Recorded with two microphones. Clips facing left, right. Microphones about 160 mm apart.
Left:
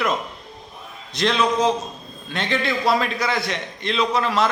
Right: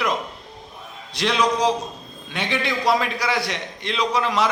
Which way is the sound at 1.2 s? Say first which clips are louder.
Left 1 dB; 10° right (ahead or behind).